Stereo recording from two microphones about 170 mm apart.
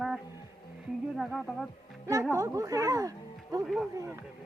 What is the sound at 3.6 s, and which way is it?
Speech, centre (ahead or behind).